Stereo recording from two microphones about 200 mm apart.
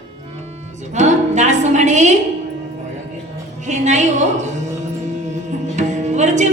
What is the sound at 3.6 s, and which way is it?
Music, 35° right (ahead or behind).